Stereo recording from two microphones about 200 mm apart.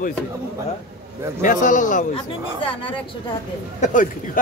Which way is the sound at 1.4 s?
40° left (ahead or behind).